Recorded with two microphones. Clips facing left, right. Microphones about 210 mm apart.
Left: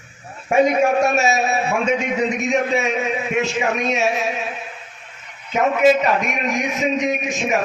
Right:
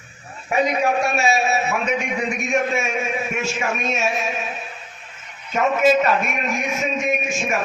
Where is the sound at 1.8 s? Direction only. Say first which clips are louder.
Left 4 dB; 25° left (ahead or behind).